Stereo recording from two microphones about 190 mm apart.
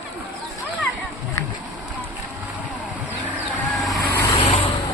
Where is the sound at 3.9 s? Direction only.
15° left (ahead or behind).